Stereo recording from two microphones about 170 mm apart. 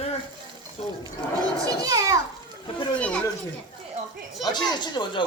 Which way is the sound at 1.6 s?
20° right (ahead or behind).